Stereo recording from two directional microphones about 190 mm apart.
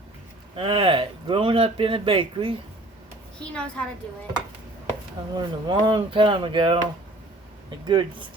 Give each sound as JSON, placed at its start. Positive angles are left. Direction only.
{"t": 0.5, "sound": "speech", "side_deg": -30}
{"t": 3.3, "sound": "a woman's voice", "side_deg": 5}
{"t": 5.3, "sound": "speech", "side_deg": -25}